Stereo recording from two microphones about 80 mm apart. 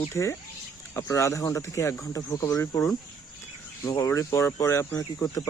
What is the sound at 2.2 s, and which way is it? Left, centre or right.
Speech, left.